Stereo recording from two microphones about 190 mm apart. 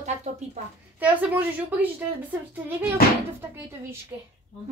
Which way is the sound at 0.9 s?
10° right (ahead or behind).